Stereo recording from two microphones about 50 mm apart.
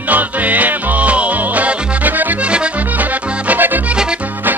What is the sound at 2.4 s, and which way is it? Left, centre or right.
Music, right.